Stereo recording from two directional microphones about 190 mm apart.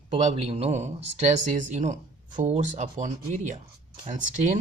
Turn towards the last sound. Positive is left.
turn(degrees=-40)  # may be behind; listen again after turning